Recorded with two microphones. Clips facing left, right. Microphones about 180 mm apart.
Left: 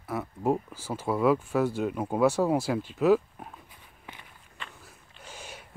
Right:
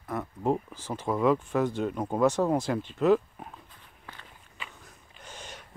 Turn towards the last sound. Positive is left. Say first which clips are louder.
# even
turn(degrees=10)  # may be behind; listen again after turning